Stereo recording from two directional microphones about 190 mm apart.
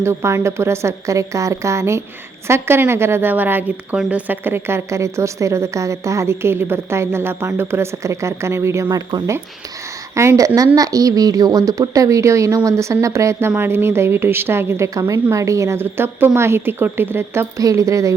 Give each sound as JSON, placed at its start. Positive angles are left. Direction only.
{"t": 0.0, "sound": "a woman's voice", "side_deg": -15}